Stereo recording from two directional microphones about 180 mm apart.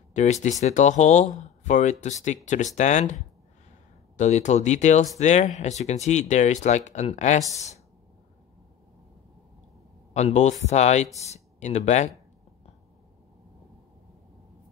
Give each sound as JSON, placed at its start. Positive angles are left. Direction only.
{"t": 0.1, "sound": "speech", "side_deg": 40}
{"t": 4.2, "sound": "speech", "side_deg": 40}
{"t": 10.1, "sound": "speech", "side_deg": 40}